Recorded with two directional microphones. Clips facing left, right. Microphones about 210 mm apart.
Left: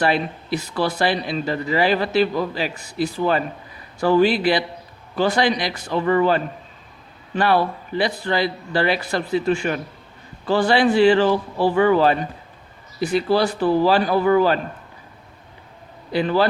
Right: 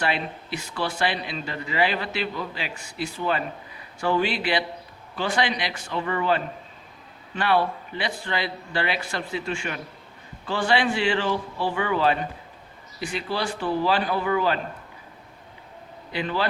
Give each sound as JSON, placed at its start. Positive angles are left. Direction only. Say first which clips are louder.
{"t": 0.0, "sound": "speech", "louder": "left 6 dB", "side_deg": 40}
{"t": 16.1, "sound": "speech", "louder": "left 8 dB", "side_deg": 40}